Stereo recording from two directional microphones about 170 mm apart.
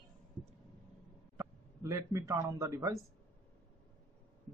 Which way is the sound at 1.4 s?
15° right (ahead or behind).